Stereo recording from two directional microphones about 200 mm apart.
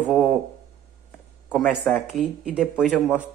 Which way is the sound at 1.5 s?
5° left (ahead or behind).